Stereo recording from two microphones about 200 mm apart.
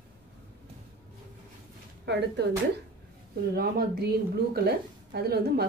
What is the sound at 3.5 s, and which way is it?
Speech, 50° right (ahead or behind).